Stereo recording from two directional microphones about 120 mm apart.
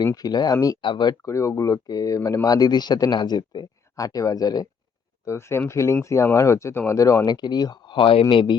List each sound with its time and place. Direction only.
0.0 s speech: 30° left (ahead or behind)
0.8 s speech: 40° left (ahead or behind)
1.2 s speech: 25° left (ahead or behind)
5.2 s speech: 20° left (ahead or behind); by 8.5 s 45° left (ahead or behind)